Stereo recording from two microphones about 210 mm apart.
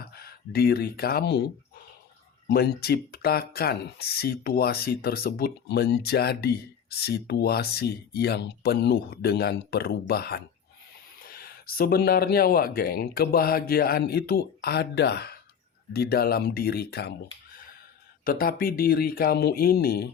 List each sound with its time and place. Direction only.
0.0 s speech: 45° left (ahead or behind)
2.5 s speech: 50° left (ahead or behind)
18.3 s speech: 45° left (ahead or behind)